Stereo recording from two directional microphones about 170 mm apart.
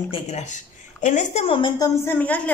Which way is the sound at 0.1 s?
40° left (ahead or behind).